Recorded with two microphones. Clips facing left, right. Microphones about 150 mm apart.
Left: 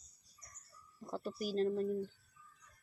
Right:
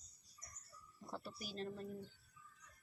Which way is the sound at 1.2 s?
40° left (ahead or behind).